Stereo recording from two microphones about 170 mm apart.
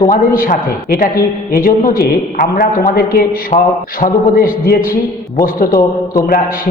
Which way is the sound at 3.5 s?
40° left (ahead or behind).